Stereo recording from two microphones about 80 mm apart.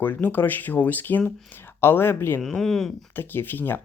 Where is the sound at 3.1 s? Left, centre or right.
Left.